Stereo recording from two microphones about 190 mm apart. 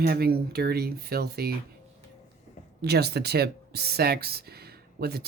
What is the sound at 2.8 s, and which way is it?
A woman's voice, 60° right (ahead or behind).